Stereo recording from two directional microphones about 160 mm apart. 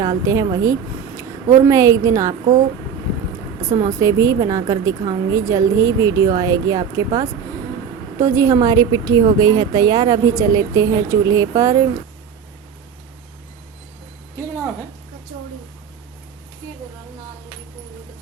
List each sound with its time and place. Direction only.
0.0 s speech: 25° right (ahead or behind)
3.8 s a woman's voice: 20° right (ahead or behind)